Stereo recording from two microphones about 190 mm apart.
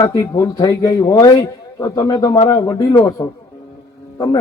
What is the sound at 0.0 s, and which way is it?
A man's voice, 15° left (ahead or behind).